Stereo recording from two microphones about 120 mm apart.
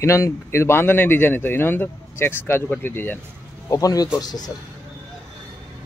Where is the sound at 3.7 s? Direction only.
30° left (ahead or behind).